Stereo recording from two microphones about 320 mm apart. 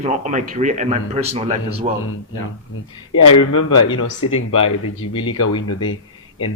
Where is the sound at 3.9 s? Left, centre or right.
Left.